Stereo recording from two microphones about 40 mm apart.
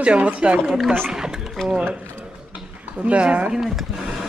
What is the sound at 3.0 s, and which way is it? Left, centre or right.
Speech, right.